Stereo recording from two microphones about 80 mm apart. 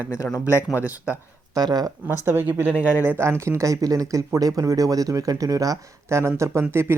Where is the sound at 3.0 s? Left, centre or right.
Right.